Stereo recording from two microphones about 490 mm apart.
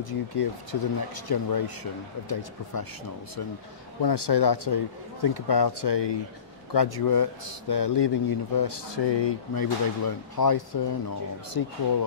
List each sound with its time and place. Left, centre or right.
0.0 s a man's voice: left
4.0 s a man's voice: left